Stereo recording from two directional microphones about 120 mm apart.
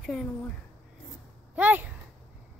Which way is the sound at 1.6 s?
15° right (ahead or behind).